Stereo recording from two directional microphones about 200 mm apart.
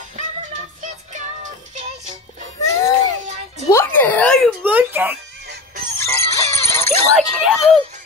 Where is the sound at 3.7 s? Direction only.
10° left (ahead or behind).